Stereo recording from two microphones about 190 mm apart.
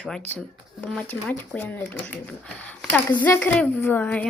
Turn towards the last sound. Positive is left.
turn(degrees=10)  # may be behind; listen again after turning